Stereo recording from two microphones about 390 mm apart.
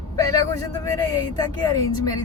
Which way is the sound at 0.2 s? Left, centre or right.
Centre.